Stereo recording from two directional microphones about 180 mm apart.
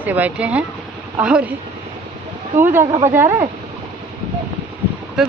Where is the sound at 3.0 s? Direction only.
15° right (ahead or behind).